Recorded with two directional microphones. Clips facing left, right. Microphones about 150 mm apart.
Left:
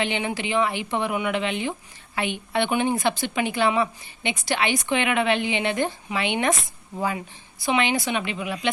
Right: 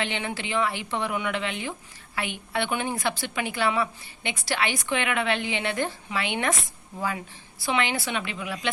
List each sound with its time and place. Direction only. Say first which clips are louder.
0.0 s a woman's voice: left 4 dB; 15° left (ahead or behind)
7.6 s a woman's voice: left 4 dB; 20° left (ahead or behind)